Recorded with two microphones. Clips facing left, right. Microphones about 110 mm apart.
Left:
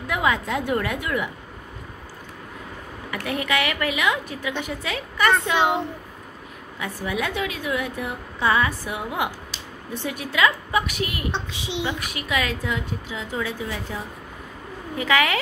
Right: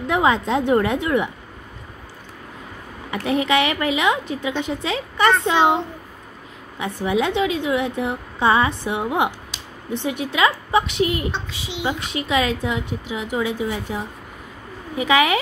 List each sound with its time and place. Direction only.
0.0 s a woman's voice: 25° right (ahead or behind)
3.1 s a woman's voice: 25° right (ahead or behind)
6.8 s a woman's voice: 20° right (ahead or behind)
11.3 s a woman's voice: 20° left (ahead or behind)
11.8 s a woman's voice: 20° right (ahead or behind)